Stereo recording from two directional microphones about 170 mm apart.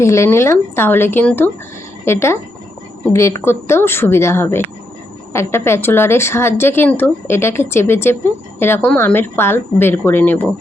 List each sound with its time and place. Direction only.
0.0 s a woman's voice: 15° left (ahead or behind)